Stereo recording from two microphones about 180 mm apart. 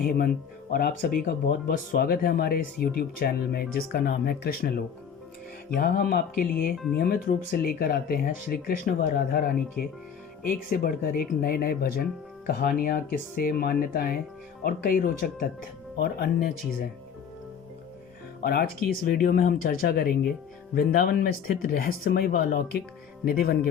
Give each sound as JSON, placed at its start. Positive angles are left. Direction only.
{"t": 0.7, "sound": "speech", "side_deg": 55}
{"t": 18.4, "sound": "speech", "side_deg": 55}